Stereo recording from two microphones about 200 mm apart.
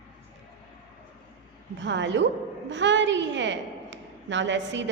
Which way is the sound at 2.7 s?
65° right (ahead or behind).